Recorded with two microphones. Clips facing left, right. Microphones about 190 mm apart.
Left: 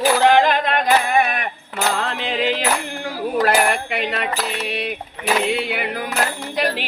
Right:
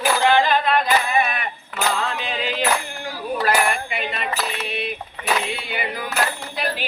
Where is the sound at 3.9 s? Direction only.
70° left (ahead or behind).